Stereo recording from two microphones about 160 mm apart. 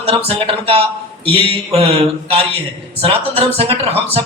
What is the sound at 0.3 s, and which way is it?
Speech, 35° right (ahead or behind).